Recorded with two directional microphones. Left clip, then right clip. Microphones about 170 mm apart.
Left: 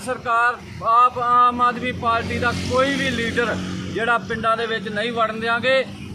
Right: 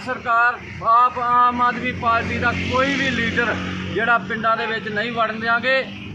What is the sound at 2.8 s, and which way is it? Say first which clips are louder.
A man's voice: even; 35° left (ahead or behind).